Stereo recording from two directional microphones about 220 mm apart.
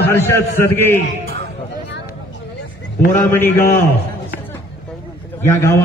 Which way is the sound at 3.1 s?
10° left (ahead or behind).